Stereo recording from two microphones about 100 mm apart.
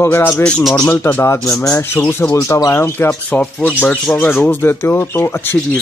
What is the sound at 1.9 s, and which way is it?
Speech, 15° left (ahead or behind).